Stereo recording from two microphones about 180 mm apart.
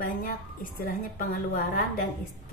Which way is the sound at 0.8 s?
55° left (ahead or behind).